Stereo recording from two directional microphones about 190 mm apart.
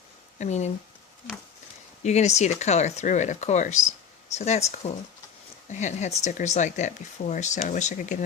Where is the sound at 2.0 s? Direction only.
35° left (ahead or behind).